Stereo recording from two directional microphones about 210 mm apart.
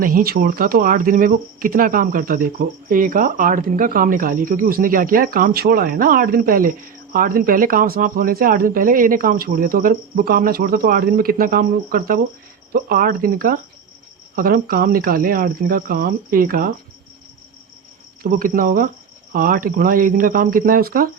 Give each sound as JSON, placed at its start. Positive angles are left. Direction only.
{"t": 0.0, "sound": "speech", "side_deg": -45}
{"t": 18.2, "sound": "speech", "side_deg": -45}